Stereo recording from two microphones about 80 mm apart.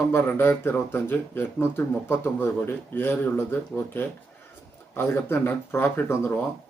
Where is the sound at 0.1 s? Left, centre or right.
Left.